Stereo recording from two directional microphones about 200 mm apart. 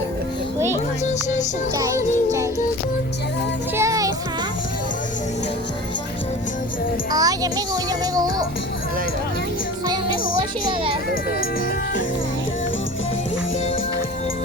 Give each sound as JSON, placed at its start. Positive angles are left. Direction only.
{"t": 1.8, "sound": "music", "side_deg": -15}
{"t": 3.8, "sound": "music", "side_deg": -15}
{"t": 7.1, "sound": "music", "side_deg": -20}
{"t": 9.8, "sound": "music", "side_deg": -20}